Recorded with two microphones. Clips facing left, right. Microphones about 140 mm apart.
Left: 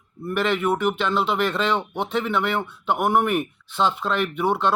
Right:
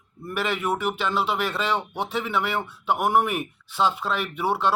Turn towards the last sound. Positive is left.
turn(degrees=-10)  # may be behind; listen again after turning